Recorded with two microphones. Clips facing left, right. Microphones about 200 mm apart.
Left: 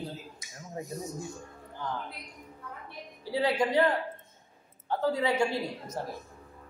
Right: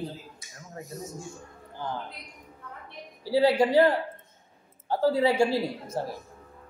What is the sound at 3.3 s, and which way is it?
A man's voice, 30° right (ahead or behind).